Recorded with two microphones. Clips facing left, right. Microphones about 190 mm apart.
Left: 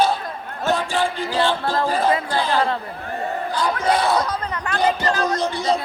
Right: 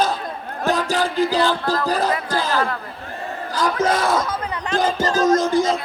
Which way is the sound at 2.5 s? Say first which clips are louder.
Left 3 dB; 25° left (ahead or behind).